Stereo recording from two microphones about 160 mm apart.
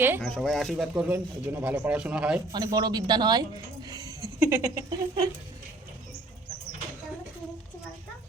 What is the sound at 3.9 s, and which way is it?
Laughter, 20° right (ahead or behind).